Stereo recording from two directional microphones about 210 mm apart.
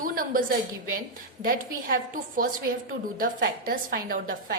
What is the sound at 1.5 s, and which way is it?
A woman's voice, 40° right (ahead or behind).